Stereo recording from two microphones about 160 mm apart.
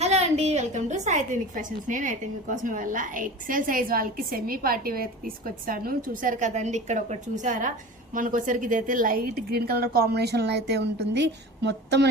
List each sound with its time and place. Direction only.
0.0 s a woman's voice: 40° right (ahead or behind); by 12.0 s 90° right